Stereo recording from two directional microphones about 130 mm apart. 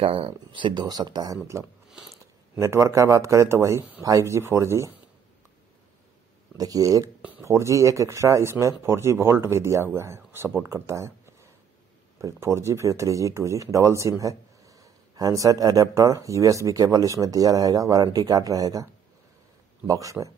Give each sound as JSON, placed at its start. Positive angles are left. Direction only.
{"t": 0.0, "sound": "speech", "side_deg": -45}
{"t": 6.5, "sound": "speech", "side_deg": -30}
{"t": 7.2, "sound": "a sound", "side_deg": -10}
{"t": 7.4, "sound": "speech", "side_deg": -20}
{"t": 12.2, "sound": "speech", "side_deg": -20}
{"t": 19.9, "sound": "speech", "side_deg": -25}